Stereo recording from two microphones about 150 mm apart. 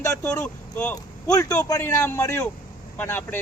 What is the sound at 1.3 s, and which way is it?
Speech, 25° left (ahead or behind).